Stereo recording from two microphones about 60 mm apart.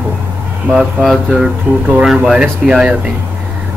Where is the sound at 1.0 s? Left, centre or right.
Centre.